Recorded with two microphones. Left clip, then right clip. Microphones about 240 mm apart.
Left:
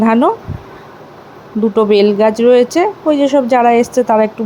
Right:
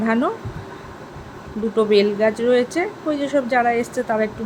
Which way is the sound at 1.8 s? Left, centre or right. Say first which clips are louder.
Left 6 dB; left.